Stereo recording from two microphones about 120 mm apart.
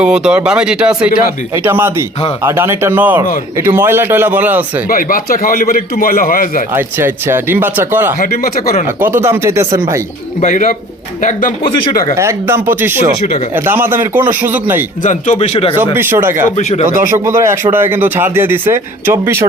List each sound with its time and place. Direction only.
0.0 s speech: 10° right (ahead or behind)
1.5 s speech: 20° right (ahead or behind)
6.7 s speech: 20° right (ahead or behind)
11.2 s speech: 90° left
12.1 s speech: 20° right (ahead or behind)
15.0 s speech: 90° left
15.4 s speech: 50° left (ahead or behind)
16.0 s speech: 20° right (ahead or behind)
16.6 s speech: 70° left (ahead or behind)
17.1 s speech: 20° right (ahead or behind)